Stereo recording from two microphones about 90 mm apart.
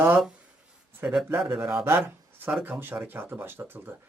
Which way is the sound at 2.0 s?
20° right (ahead or behind).